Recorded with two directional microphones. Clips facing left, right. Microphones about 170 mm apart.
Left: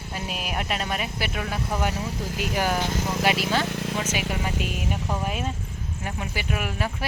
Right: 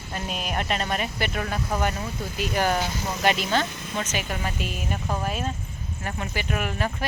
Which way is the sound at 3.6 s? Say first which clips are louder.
Left 6 dB; 70° left (ahead or behind).